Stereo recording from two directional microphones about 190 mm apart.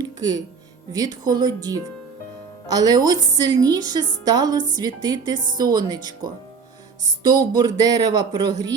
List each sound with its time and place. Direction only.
0.0 s music: 20° right (ahead or behind)
0.9 s a woman's voice: 20° right (ahead or behind)